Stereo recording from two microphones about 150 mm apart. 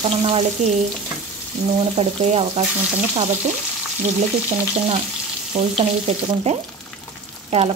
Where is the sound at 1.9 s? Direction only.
45° right (ahead or behind).